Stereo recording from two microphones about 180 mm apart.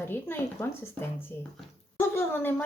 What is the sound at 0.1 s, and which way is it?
Speech, 10° left (ahead or behind).